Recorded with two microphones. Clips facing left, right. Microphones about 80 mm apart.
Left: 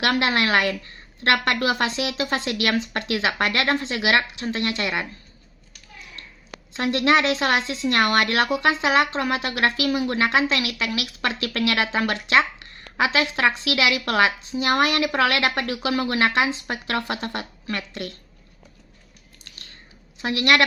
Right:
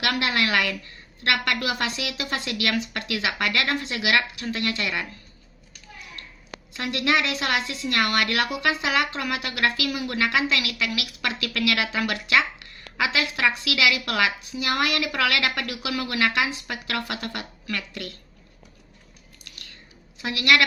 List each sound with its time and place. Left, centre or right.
0.0 s speech: left
6.7 s speech: left
20.2 s speech: left